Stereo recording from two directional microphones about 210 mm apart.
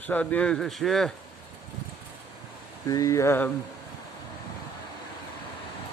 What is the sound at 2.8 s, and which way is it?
Speech, 15° left (ahead or behind).